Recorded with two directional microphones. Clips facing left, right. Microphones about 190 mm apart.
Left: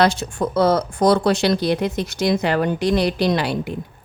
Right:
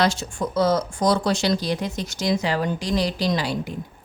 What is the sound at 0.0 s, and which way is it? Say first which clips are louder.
Speech: left 4 dB; 60° left (ahead or behind).